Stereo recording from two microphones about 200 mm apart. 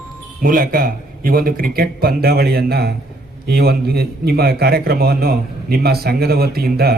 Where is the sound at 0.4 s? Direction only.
45° right (ahead or behind).